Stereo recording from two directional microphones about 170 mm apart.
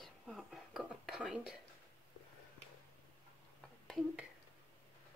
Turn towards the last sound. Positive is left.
turn(degrees=0)  # may be behind; listen again after turning